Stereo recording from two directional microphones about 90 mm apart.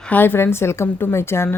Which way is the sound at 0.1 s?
20° left (ahead or behind).